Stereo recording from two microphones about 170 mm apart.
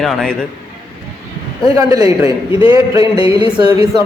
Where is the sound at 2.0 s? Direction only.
35° left (ahead or behind).